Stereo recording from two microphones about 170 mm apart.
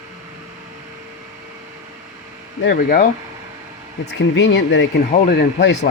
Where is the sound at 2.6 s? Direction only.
55° left (ahead or behind).